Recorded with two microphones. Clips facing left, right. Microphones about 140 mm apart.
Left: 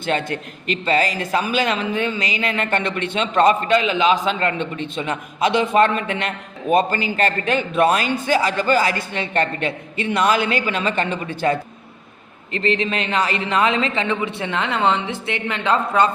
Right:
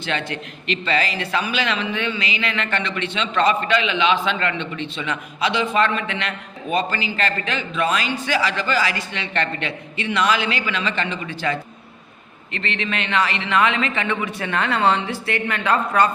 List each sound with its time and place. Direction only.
0.0 s a man's voice: 45° left (ahead or behind)
12.5 s a man's voice: 35° left (ahead or behind)